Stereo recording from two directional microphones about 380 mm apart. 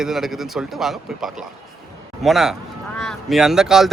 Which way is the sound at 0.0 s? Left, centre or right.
Centre.